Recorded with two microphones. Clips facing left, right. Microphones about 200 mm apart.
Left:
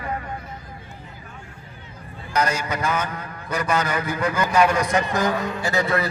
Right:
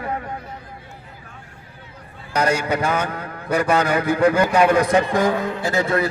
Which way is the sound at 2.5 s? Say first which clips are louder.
Right 5 dB; 60° right (ahead or behind).